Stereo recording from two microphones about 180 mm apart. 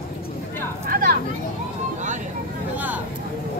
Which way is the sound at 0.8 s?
55° right (ahead or behind).